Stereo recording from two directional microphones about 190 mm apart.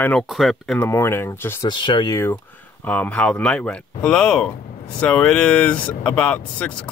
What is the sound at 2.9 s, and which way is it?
Speech, 5° left (ahead or behind).